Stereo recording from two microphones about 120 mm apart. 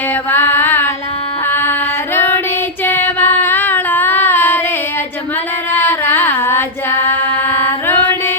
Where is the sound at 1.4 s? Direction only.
15° left (ahead or behind).